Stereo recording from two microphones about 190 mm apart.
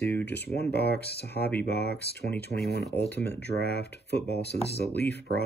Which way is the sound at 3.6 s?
60° left (ahead or behind).